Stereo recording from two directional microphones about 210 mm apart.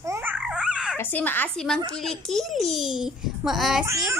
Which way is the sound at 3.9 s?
15° right (ahead or behind).